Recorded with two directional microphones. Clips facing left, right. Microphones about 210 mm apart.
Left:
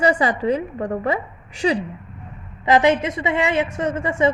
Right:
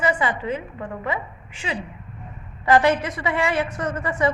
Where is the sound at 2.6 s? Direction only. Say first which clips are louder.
Left 2 dB; 20° left (ahead or behind).